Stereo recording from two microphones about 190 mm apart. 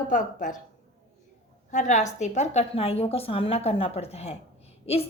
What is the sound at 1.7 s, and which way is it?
Speech, 40° left (ahead or behind).